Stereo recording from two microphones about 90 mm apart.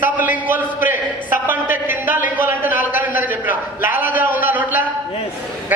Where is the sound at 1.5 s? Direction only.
20° right (ahead or behind).